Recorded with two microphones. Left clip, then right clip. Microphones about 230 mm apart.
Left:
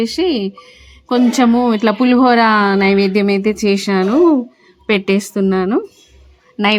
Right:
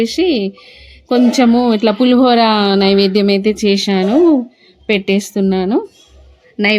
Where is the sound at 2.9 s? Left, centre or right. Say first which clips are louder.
Right 2 dB; centre.